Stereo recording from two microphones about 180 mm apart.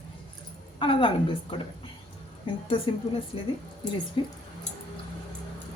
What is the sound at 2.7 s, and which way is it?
A woman's voice, 30° left (ahead or behind).